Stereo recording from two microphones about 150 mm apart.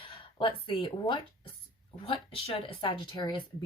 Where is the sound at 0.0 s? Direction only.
35° left (ahead or behind).